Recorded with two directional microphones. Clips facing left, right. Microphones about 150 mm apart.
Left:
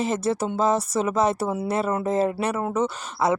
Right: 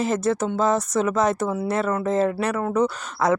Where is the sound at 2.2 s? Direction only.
10° left (ahead or behind).